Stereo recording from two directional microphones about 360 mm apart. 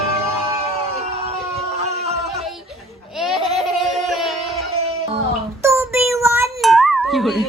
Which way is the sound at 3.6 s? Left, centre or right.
Centre.